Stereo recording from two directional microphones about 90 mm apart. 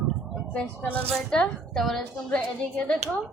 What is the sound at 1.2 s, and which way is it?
A woman's voice, 10° left (ahead or behind).